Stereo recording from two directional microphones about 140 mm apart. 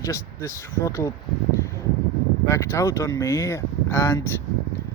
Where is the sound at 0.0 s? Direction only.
20° left (ahead or behind).